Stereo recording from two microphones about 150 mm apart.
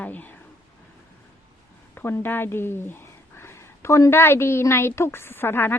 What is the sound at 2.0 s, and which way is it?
Speech, 15° left (ahead or behind).